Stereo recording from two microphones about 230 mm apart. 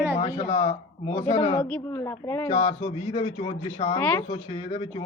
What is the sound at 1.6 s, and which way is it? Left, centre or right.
Speech, centre.